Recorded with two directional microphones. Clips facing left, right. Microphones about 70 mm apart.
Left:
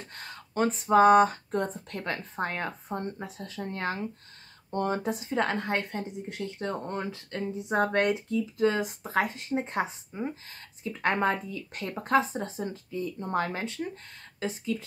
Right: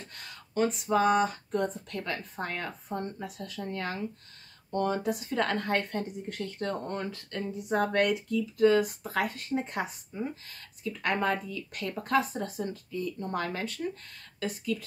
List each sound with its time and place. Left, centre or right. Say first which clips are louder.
0.0 s a woman's voice: left 3 dB; left